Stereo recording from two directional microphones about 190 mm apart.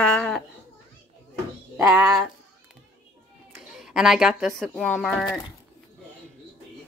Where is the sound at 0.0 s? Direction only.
5° left (ahead or behind).